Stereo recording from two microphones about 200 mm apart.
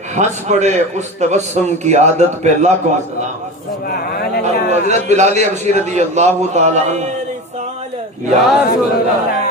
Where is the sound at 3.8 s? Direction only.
50° left (ahead or behind).